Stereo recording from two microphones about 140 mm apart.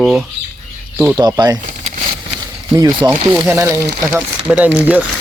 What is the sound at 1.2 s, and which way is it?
Speech, 30° right (ahead or behind).